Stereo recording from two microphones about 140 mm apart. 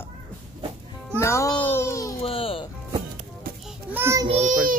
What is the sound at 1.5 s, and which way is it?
Speech, 35° left (ahead or behind).